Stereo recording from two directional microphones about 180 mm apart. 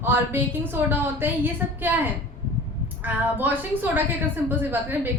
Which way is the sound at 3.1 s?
10° right (ahead or behind).